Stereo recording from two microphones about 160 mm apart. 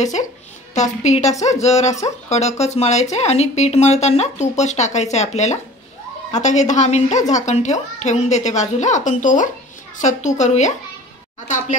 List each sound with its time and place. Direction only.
0.0 s a woman's voice: 50° left (ahead or behind)